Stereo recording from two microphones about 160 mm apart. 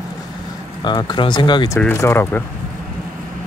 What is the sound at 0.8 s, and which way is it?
Speech, 25° left (ahead or behind).